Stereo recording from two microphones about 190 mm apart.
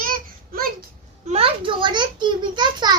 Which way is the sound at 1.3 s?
30° right (ahead or behind).